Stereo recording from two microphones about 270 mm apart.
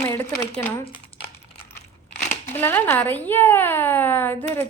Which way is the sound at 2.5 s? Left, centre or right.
Centre.